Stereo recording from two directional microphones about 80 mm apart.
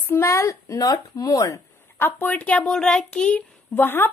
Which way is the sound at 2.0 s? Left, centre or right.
Left.